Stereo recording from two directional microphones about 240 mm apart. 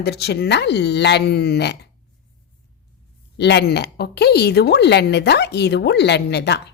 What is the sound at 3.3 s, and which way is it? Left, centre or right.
Speech, left.